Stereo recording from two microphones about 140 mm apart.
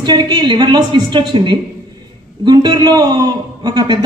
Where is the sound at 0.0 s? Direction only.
30° right (ahead or behind).